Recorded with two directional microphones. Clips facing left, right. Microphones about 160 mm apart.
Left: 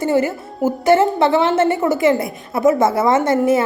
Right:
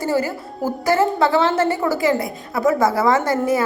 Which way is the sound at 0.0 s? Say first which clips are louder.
Left 4 dB; 25° left (ahead or behind).